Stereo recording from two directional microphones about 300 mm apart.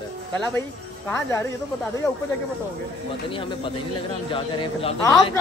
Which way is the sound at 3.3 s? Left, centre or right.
Centre.